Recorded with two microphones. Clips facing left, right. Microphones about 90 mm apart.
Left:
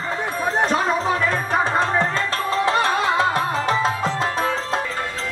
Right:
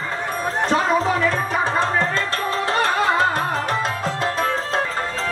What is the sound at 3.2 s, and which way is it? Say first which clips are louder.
Music: even; 50° right (ahead or behind).